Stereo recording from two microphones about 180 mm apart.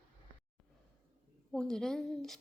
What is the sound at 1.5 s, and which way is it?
Speech, 5° left (ahead or behind).